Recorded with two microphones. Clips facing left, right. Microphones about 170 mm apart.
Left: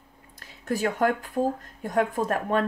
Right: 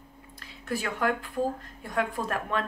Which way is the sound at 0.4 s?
45° left (ahead or behind).